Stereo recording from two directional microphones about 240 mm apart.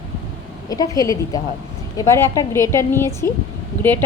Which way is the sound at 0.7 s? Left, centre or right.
Centre.